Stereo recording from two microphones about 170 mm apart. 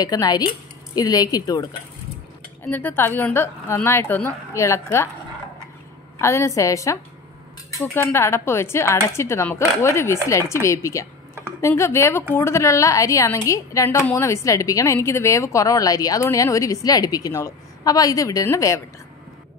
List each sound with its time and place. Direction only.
0.0 s a woman's voice: 25° left (ahead or behind)
6.1 s a woman's voice: 15° left (ahead or behind)